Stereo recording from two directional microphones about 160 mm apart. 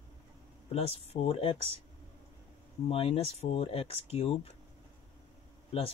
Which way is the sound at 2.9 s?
40° left (ahead or behind).